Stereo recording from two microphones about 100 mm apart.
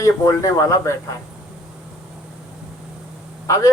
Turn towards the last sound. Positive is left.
turn(degrees=30)  # may be behind; listen again after turning